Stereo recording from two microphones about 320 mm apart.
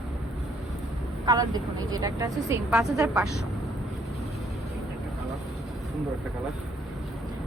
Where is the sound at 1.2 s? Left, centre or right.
Centre.